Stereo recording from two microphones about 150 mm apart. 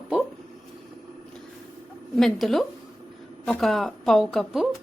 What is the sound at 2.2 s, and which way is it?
A woman's voice, centre (ahead or behind).